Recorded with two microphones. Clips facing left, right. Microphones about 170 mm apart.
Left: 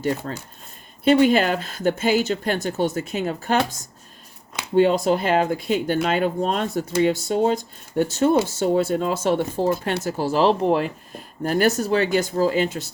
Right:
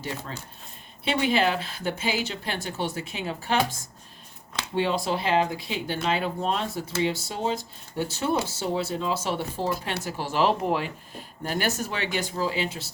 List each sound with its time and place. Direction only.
1.0 s speech: 45° left (ahead or behind)
4.7 s speech: 45° left (ahead or behind)
11.4 s speech: 45° left (ahead or behind)